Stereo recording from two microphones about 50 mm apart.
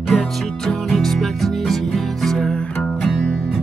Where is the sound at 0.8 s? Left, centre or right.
Centre.